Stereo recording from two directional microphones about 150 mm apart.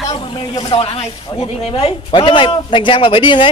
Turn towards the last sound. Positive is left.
turn(degrees=35)  # may be behind; listen again after turning